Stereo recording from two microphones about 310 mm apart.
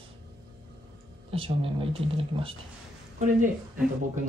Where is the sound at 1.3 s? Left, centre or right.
Centre.